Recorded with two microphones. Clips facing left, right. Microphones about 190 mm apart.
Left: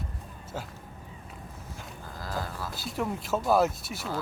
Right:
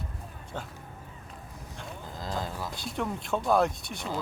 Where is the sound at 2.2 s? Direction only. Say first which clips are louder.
Right 1 dB; 20° right (ahead or behind).